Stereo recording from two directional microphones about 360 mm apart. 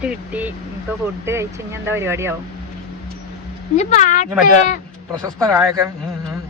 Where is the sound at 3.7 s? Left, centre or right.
Centre.